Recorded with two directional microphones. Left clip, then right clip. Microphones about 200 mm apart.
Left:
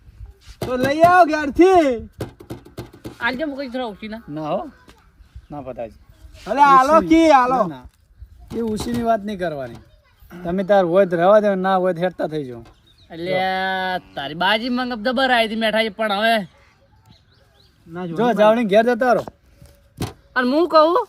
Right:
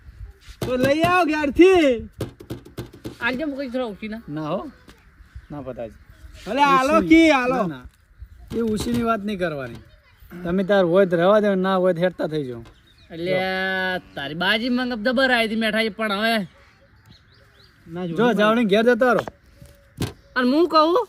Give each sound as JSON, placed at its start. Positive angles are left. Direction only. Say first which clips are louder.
{"t": 0.8, "sound": "speech", "louder": "left 6 dB", "side_deg": 5}
{"t": 4.4, "sound": "speech", "louder": "left 3 dB", "side_deg": -15}
{"t": 5.9, "sound": "a sound", "louder": "right 1 dB", "side_deg": 0}
{"t": 6.5, "sound": "speech", "louder": "left 5 dB", "side_deg": 15}
{"t": 8.4, "sound": "speech", "louder": "even", "side_deg": 0}
{"t": 9.0, "sound": "speech", "louder": "left 5 dB", "side_deg": -20}
{"t": 12.6, "sound": "speech", "louder": "left 2 dB", "side_deg": 0}
{"t": 17.9, "sound": "speech", "louder": "left 1 dB", "side_deg": 5}
{"t": 18.2, "sound": "speech", "louder": "left 3 dB", "side_deg": -15}
{"t": 20.1, "sound": "speech", "louder": "left 2 dB", "side_deg": 0}